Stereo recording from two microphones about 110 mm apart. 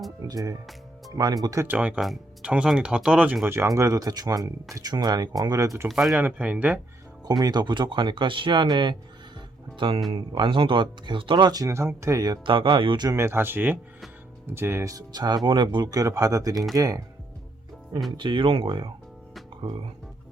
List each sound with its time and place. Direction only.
0.3 s speech: 35° right (ahead or behind)
1.6 s speech: 15° right (ahead or behind)
3.4 s speech: 25° right (ahead or behind)
5.9 s speech: centre (ahead or behind)
6.1 s speech: 15° right (ahead or behind)
7.3 s speech: 40° right (ahead or behind)
12.5 s speech: 50° right (ahead or behind)
13.1 s speech: 25° right (ahead or behind)
18.2 s speech: 50° right (ahead or behind)